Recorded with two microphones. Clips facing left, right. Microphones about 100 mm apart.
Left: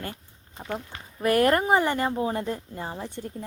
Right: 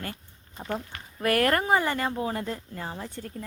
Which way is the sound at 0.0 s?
20° left (ahead or behind).